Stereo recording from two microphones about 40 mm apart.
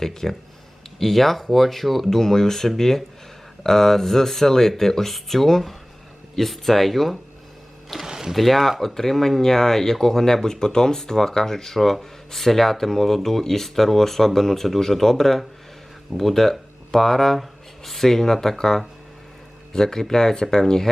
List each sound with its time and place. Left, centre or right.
0.0 s speech: centre
8.0 s a sound: centre
8.3 s speech: centre